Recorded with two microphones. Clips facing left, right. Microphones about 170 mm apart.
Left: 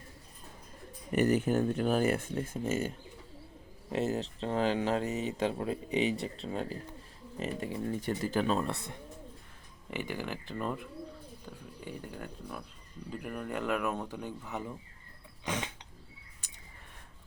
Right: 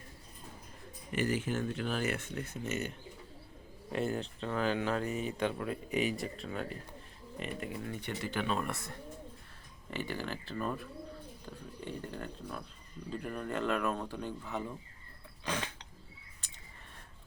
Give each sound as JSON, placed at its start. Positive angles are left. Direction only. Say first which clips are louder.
{"t": 1.1, "sound": "speech", "louder": "left 6 dB", "side_deg": 40}
{"t": 3.9, "sound": "speech", "louder": "left 3 dB", "side_deg": 25}
{"t": 9.9, "sound": "speech", "louder": "left 1 dB", "side_deg": 15}
{"t": 11.9, "sound": "speech", "louder": "right 1 dB", "side_deg": 10}
{"t": 15.4, "sound": "a sound", "louder": "left 1 dB", "side_deg": 20}